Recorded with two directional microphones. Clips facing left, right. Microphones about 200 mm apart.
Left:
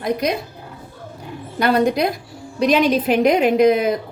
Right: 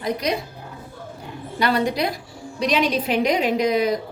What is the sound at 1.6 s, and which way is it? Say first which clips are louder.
A woman's voice: left 4 dB; 50° left (ahead or behind).